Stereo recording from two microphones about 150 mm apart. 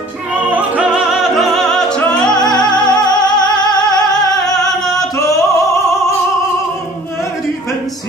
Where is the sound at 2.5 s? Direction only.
30° left (ahead or behind).